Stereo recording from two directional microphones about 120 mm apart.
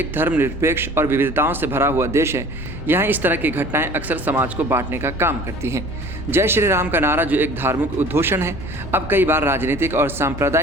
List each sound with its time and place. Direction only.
0.0 s a man's voice: 15° right (ahead or behind)